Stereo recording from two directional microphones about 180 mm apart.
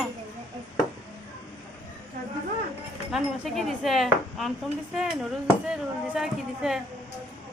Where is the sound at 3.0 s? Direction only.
Centre (ahead or behind).